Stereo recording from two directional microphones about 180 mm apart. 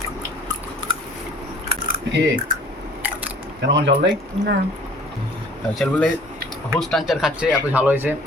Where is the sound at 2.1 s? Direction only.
50° right (ahead or behind).